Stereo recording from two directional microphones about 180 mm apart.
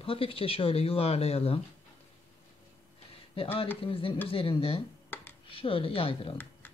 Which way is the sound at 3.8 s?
30° left (ahead or behind).